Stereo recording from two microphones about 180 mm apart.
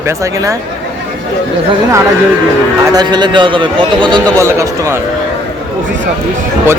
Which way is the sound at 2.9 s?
25° right (ahead or behind).